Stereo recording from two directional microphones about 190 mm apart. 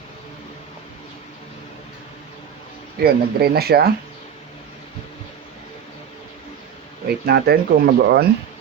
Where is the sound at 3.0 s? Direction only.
55° right (ahead or behind).